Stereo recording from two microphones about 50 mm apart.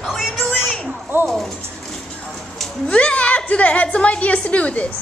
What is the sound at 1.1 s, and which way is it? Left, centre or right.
Speech, right.